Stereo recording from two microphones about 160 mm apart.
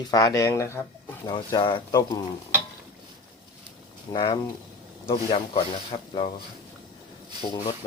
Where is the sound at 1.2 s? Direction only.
30° left (ahead or behind).